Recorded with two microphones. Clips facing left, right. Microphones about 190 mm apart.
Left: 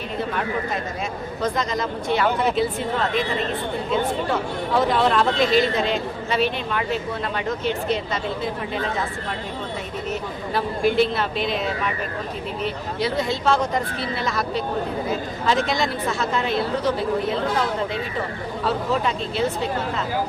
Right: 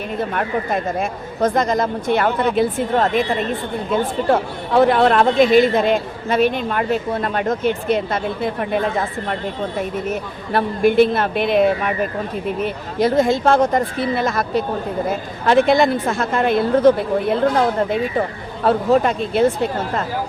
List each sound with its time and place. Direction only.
0.3 s speech: 55° right (ahead or behind)
4.3 s speech: 60° right (ahead or behind)
10.5 s speech: 55° right (ahead or behind)
18.6 s speech: 55° right (ahead or behind)